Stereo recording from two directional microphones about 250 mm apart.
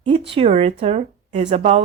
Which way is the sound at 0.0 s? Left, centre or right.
Right.